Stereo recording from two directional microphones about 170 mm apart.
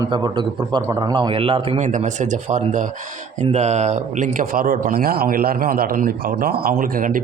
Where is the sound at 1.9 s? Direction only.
45° right (ahead or behind).